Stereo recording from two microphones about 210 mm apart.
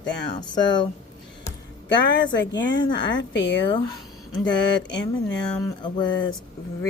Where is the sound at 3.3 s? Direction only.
55° left (ahead or behind).